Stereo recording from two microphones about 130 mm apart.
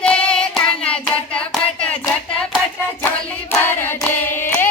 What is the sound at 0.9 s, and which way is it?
Hands, 10° left (ahead or behind).